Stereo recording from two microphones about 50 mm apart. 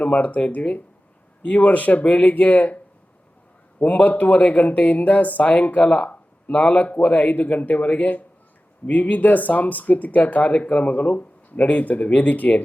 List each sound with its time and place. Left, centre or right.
0.0 s speech: left
2.0 s speech: left
3.8 s speech: left